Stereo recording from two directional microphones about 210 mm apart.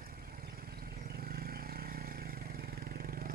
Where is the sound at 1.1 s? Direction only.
45° right (ahead or behind).